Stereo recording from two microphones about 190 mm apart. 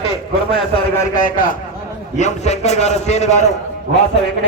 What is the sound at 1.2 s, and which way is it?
A man's voice, 45° left (ahead or behind).